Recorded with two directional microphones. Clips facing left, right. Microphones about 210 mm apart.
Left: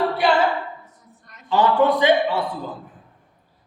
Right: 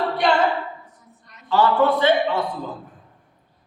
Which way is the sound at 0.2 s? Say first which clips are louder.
Even; 5° left (ahead or behind).